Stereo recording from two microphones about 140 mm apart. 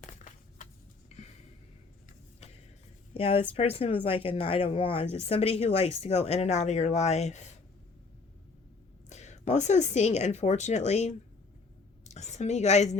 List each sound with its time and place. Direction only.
0.0 s a sound: 65° left (ahead or behind)
3.2 s speech: 45° left (ahead or behind)
9.0 s a woman's voice: 55° left (ahead or behind)